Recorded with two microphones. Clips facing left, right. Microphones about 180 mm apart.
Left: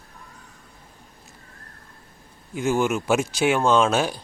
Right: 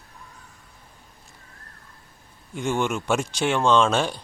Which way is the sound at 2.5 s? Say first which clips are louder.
Left 3 dB; 5° left (ahead or behind).